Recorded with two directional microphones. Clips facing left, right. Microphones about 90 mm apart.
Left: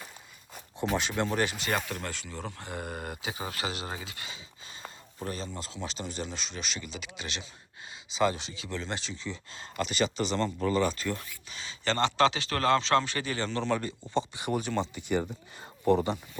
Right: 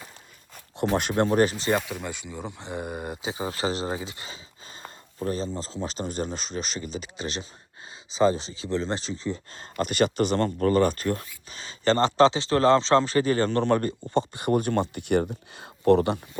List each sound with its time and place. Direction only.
0.9 s speech: 50° right (ahead or behind)
1.8 s speech: 10° right (ahead or behind); by 16.2 s 65° right (ahead or behind)